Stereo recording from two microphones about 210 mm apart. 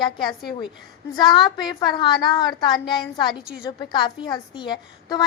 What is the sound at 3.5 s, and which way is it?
Speech, 5° right (ahead or behind).